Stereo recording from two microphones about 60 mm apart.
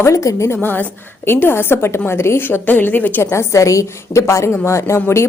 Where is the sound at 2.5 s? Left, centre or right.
Left.